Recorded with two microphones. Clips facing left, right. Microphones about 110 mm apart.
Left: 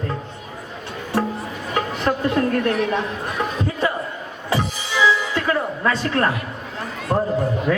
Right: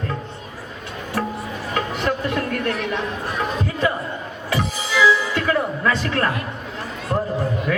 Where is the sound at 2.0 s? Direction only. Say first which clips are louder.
Left 6 dB; 35° left (ahead or behind).